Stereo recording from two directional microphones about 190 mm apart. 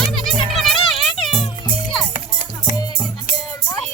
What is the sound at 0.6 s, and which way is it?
Music, centre (ahead or behind).